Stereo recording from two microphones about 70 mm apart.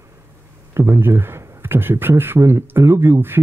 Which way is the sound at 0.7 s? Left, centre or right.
Right.